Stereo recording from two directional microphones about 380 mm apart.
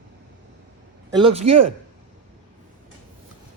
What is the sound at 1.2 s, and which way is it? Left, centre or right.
Speech, centre.